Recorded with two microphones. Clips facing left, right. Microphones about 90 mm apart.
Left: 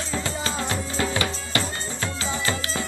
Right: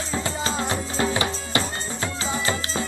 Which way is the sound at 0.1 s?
25° right (ahead or behind).